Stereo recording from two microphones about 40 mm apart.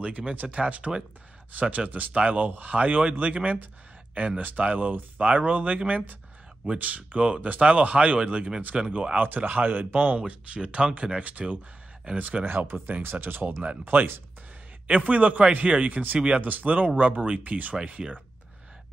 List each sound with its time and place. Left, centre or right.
0.6 s speech: right
1.9 s speech: right
2.1 s speech: right
9.2 s speech: right
13.0 s speech: right
14.9 s speech: right
15.9 s speech: right
17.8 s speech: right